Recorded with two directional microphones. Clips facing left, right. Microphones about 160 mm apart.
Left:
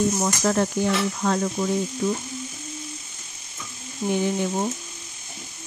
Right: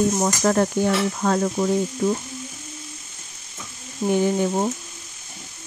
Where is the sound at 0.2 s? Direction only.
45° right (ahead or behind).